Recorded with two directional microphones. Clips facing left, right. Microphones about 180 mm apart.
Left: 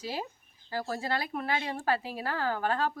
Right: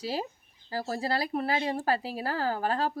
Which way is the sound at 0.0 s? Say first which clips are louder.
Right 3 dB; 35° right (ahead or behind).